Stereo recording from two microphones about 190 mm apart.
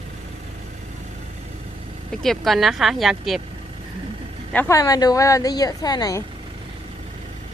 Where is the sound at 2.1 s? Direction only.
Centre (ahead or behind).